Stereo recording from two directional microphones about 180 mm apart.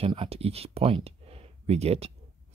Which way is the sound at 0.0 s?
30° right (ahead or behind).